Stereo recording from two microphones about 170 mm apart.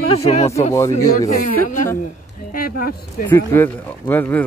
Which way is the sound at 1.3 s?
50° left (ahead or behind).